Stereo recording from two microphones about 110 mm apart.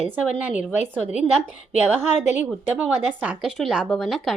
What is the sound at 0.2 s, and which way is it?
Speech, 10° right (ahead or behind).